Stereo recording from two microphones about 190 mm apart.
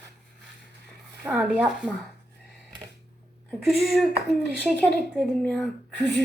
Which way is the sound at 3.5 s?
Centre (ahead or behind).